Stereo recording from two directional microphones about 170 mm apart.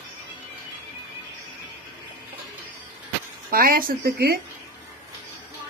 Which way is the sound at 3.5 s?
60° right (ahead or behind).